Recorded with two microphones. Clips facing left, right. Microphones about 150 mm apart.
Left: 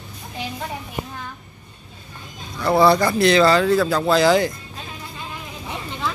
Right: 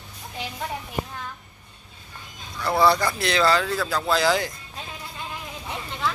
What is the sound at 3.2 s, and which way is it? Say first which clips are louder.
Speech: left 7 dB; centre (ahead or behind).